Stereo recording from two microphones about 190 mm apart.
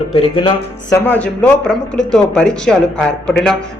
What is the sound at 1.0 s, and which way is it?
Speech, 10° left (ahead or behind).